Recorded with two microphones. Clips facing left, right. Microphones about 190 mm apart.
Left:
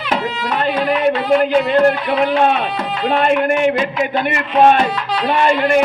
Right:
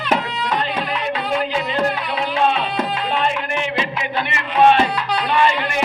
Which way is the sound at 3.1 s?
55° left (ahead or behind).